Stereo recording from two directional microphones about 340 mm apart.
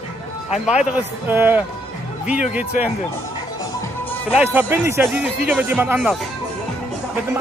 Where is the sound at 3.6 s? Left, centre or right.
Centre.